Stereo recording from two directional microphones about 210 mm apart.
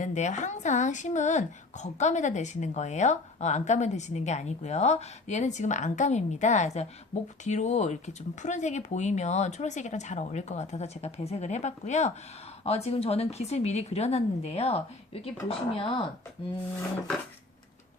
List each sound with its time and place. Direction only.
0.0 s a woman's voice: 35° left (ahead or behind)